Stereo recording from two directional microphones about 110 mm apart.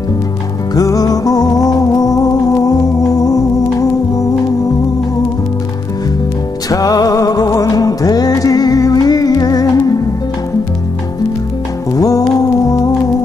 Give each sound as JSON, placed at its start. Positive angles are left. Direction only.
{"t": 0.7, "sound": "music", "side_deg": 35}
{"t": 6.7, "sound": "music", "side_deg": 35}
{"t": 11.9, "sound": "music", "side_deg": 35}